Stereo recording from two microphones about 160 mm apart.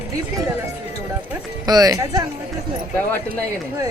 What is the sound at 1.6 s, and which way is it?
Speech, 25° right (ahead or behind).